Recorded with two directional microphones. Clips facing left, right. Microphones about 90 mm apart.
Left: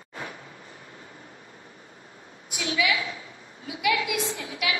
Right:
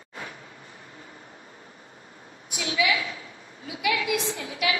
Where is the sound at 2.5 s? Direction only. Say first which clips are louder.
Even; 30° right (ahead or behind).